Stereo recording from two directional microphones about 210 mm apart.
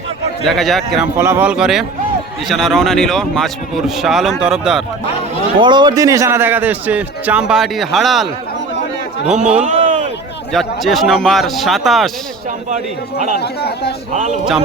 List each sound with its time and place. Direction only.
0.4 s speech: centre (ahead or behind)
1.2 s speech: 10° right (ahead or behind)
5.5 s a man's voice: 20° right (ahead or behind); by 8.3 s centre (ahead or behind)
9.2 s a man's voice: 35° right (ahead or behind)
9.6 s a sound: 35° right (ahead or behind)
10.5 s speech: centre (ahead or behind)
12.7 s a man's voice: 35° right (ahead or behind)
13.4 s speech: 50° left (ahead or behind)
14.1 s a man's voice: 35° right (ahead or behind)